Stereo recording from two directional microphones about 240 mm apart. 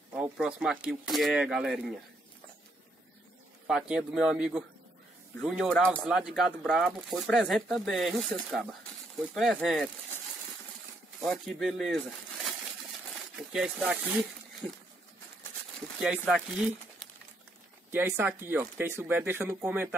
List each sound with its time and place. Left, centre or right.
0.1 s speech: centre
3.6 s speech: centre
11.2 s speech: centre
13.5 s speech: centre
14.6 s speech: centre
16.0 s speech: centre
17.9 s speech: centre